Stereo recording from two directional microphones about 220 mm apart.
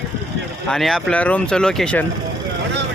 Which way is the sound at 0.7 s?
Centre (ahead or behind).